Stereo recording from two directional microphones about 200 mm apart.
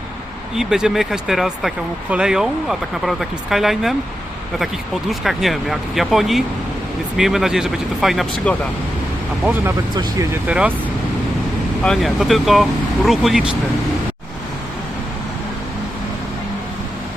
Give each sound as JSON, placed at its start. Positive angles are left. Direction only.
{"t": 0.5, "sound": "speech", "side_deg": 0}
{"t": 9.9, "sound": "speech", "side_deg": -20}
{"t": 10.4, "sound": "speech", "side_deg": -5}
{"t": 11.8, "sound": "speech", "side_deg": 0}